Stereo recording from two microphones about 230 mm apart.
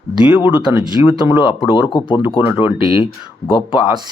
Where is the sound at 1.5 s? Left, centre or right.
Left.